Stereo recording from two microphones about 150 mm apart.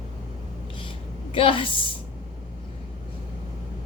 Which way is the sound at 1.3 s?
35° left (ahead or behind).